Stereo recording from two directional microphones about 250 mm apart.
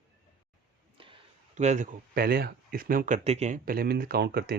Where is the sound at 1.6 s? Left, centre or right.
Right.